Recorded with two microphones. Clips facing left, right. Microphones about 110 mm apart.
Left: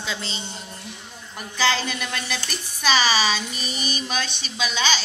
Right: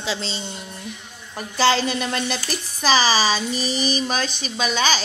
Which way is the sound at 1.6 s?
35° right (ahead or behind).